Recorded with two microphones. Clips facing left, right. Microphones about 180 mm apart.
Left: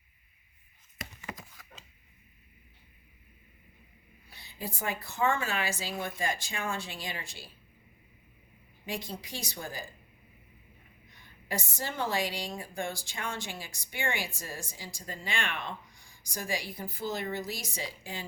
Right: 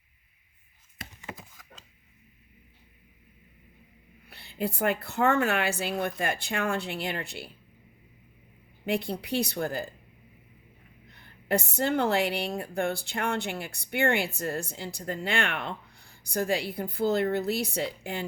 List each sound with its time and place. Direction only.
1.2 s a sound: 10° right (ahead or behind)
4.3 s a woman's voice: 65° right (ahead or behind)
8.9 s a woman's voice: 65° right (ahead or behind)
11.1 s a woman's voice: 60° right (ahead or behind)